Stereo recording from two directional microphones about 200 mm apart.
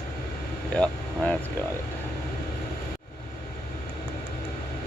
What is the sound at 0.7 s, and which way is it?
Vehicle, 5° left (ahead or behind).